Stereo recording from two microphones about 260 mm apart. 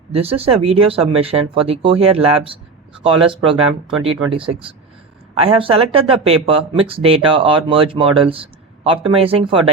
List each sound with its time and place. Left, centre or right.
0.1 s speech: right